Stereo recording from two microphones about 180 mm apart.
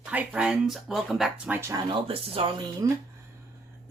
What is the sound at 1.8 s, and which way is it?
Speech, 30° right (ahead or behind).